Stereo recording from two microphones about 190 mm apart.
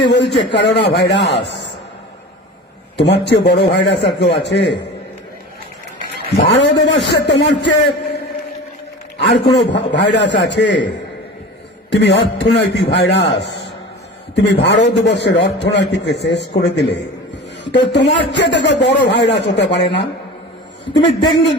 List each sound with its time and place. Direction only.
0.0 s a man's voice: 65° left (ahead or behind)
3.0 s a man's voice: 65° left (ahead or behind)
6.4 s a man's voice: 65° left (ahead or behind)
9.2 s a man's voice: 65° left (ahead or behind)
21.2 s speech: 25° left (ahead or behind)